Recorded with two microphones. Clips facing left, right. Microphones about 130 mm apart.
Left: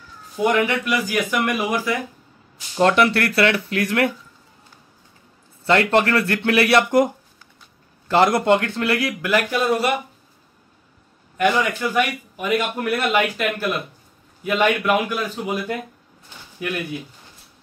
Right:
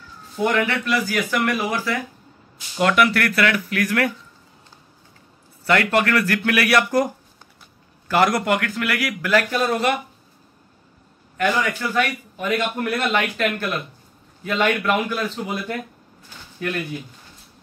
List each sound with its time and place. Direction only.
0.4 s speech: 15° left (ahead or behind)
2.8 s speech: 30° left (ahead or behind)
5.7 s speech: 25° left (ahead or behind)
8.1 s speech: 25° left (ahead or behind)
9.5 s speech: 10° left (ahead or behind)
11.3 s speech: 20° left (ahead or behind)